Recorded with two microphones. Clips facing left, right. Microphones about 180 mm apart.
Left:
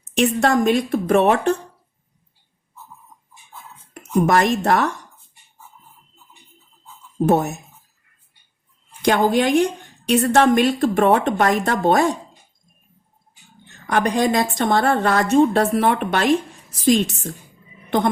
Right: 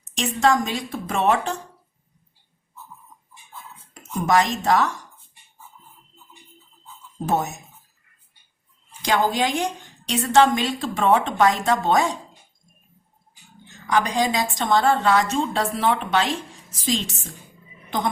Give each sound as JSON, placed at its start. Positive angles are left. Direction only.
{"t": 0.0, "sound": "a woman's voice", "side_deg": 60}
{"t": 3.9, "sound": "speech", "side_deg": 60}
{"t": 7.3, "sound": "a woman's voice", "side_deg": 60}
{"t": 8.9, "sound": "a woman's voice", "side_deg": 60}
{"t": 13.7, "sound": "a woman's voice", "side_deg": 60}